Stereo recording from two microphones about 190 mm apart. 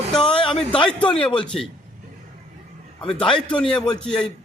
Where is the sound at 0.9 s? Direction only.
5° left (ahead or behind).